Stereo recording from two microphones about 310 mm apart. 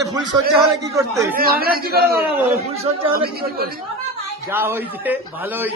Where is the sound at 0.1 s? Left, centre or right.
Centre.